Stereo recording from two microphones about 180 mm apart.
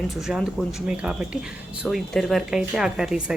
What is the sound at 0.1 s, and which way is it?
Speech, centre (ahead or behind).